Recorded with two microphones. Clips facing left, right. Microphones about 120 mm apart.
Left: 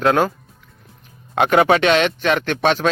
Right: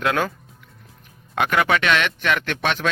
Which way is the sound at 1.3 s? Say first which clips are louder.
Left 6 dB; 35° left (ahead or behind).